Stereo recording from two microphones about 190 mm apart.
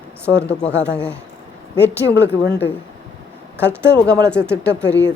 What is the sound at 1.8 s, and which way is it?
Speech, 65° left (ahead or behind).